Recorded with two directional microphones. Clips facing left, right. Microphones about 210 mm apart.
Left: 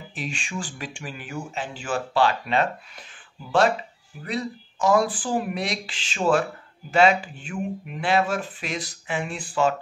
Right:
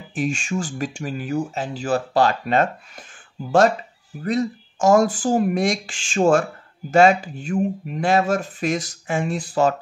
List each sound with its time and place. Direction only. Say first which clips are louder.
0.1 s speech: right 9 dB; 45° right (ahead or behind)
4.2 s speech: right 7 dB; 45° right (ahead or behind)